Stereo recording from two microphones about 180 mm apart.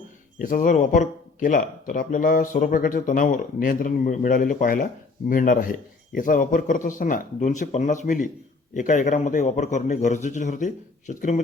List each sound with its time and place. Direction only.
0.3 s speech: 50° left (ahead or behind)